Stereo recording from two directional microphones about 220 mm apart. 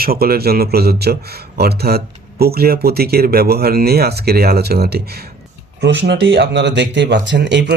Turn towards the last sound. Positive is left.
turn(degrees=-55)  # may be behind; listen again after turning